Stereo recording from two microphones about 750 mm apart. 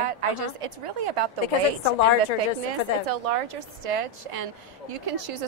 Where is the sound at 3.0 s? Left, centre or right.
Right.